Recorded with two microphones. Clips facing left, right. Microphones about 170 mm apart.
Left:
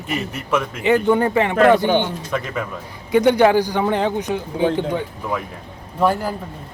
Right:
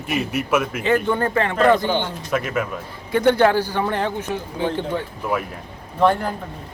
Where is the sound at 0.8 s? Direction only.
15° left (ahead or behind).